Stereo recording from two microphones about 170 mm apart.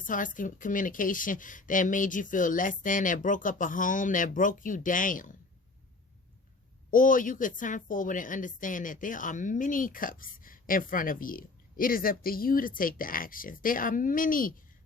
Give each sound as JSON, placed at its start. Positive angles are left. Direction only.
{"t": 0.0, "sound": "a woman's voice", "side_deg": 50}
{"t": 6.9, "sound": "a woman's voice", "side_deg": 50}